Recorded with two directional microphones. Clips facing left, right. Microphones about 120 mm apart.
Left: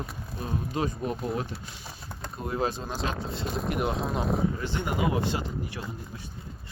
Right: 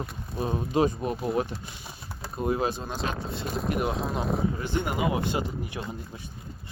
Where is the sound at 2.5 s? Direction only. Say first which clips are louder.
Right 2 dB; 15° right (ahead or behind).